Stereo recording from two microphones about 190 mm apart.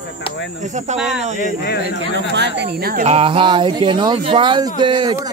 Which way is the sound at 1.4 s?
55° left (ahead or behind).